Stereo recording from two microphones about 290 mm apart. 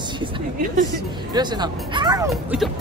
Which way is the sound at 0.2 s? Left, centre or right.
Right.